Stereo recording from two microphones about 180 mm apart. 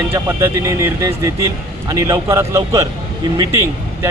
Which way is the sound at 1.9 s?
20° right (ahead or behind).